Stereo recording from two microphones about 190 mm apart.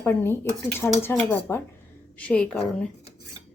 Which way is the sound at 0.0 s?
10° left (ahead or behind).